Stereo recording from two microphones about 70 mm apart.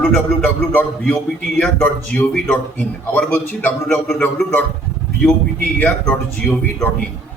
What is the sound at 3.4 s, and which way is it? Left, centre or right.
Speech, left.